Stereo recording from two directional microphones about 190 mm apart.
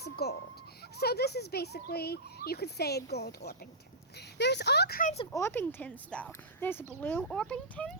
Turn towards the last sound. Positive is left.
turn(degrees=5)  # may be behind; listen again after turning